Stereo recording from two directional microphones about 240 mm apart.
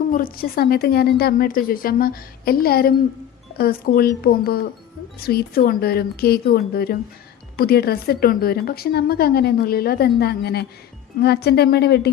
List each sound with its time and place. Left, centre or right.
0.1 s a woman's voice: left